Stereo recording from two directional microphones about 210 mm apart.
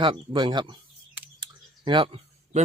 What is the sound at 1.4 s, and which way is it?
Clicking, 20° right (ahead or behind).